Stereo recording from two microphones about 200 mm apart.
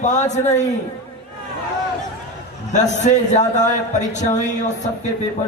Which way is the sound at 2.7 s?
35° left (ahead or behind).